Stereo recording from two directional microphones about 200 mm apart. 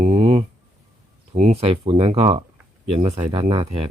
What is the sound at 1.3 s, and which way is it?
Speech, 35° right (ahead or behind).